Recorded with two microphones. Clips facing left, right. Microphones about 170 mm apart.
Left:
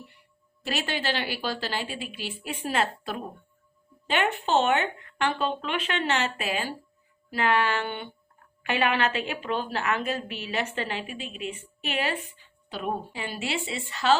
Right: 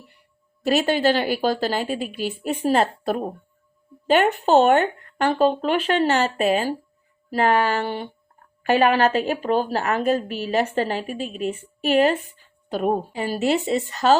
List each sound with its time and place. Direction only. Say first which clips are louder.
0.6 s a woman's voice: right 11 dB; 40° right (ahead or behind)